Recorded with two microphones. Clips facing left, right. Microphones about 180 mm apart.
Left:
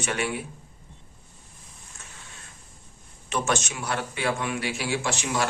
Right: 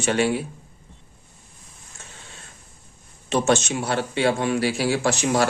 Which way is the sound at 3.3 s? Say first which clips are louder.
Right 7 dB; 25° right (ahead or behind).